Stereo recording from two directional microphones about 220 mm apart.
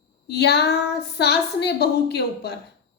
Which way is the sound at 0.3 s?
50° left (ahead or behind).